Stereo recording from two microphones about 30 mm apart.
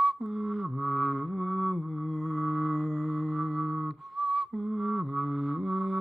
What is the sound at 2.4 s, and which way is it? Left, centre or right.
Mantra, centre.